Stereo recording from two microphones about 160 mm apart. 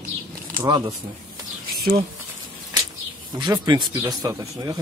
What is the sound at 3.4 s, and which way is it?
Speech, 25° right (ahead or behind).